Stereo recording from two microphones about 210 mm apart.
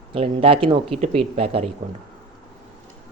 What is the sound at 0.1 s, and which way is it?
Speech, 25° right (ahead or behind).